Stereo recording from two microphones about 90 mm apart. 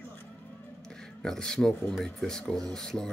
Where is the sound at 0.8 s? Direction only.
5° left (ahead or behind).